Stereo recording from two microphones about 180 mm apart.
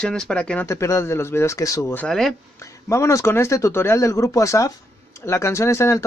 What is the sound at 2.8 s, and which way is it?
Speech, 15° left (ahead or behind).